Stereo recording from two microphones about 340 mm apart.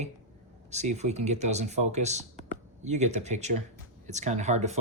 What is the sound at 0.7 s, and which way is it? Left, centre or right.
Speech, centre.